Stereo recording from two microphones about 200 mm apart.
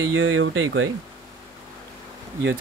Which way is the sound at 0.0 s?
80° right.